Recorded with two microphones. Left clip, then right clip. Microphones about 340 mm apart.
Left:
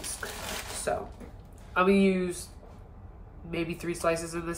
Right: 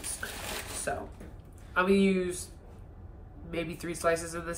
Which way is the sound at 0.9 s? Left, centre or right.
Left.